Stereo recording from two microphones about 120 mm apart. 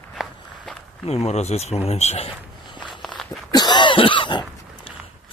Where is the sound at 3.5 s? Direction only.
35° left (ahead or behind).